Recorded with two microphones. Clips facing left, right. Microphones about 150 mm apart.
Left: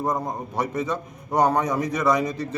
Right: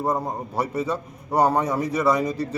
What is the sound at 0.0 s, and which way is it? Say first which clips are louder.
A man's voice: right 1 dB; 10° right (ahead or behind).